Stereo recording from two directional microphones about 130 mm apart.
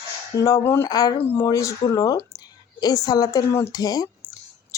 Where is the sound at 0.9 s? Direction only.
30° left (ahead or behind).